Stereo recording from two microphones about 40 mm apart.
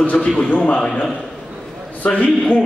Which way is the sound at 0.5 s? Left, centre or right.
Left.